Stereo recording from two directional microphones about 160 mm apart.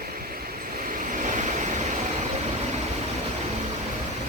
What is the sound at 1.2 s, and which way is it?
Vehicle, 50° right (ahead or behind).